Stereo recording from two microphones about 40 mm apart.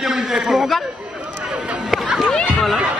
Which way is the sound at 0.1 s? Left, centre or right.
Centre.